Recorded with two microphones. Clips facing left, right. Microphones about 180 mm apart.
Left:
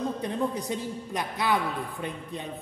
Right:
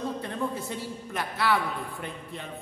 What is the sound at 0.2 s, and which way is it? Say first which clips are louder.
A man's voice: left 3 dB; 15° left (ahead or behind).